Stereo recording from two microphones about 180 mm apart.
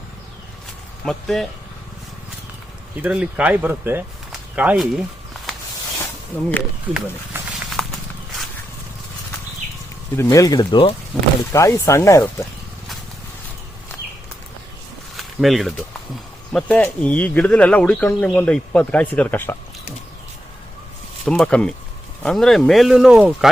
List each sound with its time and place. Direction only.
1.0 s speech: centre (ahead or behind)
3.0 s speech: 5° right (ahead or behind)
6.3 s speech: 5° left (ahead or behind)
6.8 s a sound: 5° right (ahead or behind)
10.2 s speech: 20° left (ahead or behind)
11.1 s speech: centre (ahead or behind)
11.5 s speech: 15° left (ahead or behind)
15.1 s a sound: centre (ahead or behind)
16.5 s speech: 5° left (ahead or behind)
21.2 s speech: 5° left (ahead or behind)